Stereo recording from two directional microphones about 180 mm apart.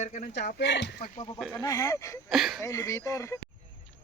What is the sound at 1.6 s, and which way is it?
Speech, 20° left (ahead or behind).